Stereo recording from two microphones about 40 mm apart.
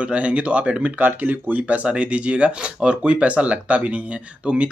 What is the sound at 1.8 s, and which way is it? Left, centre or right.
Speech, right.